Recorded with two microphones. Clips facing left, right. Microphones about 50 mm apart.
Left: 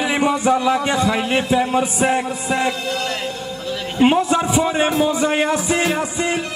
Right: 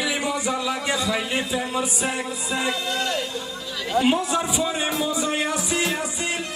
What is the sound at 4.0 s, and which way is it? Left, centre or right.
A man's voice, left.